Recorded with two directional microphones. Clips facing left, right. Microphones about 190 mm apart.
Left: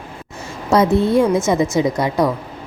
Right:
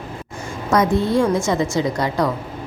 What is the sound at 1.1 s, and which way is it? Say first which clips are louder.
A woman's voice: left 2 dB; 20° left (ahead or behind).